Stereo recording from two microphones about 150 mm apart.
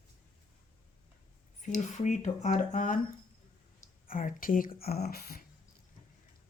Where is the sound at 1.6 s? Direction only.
55° left (ahead or behind).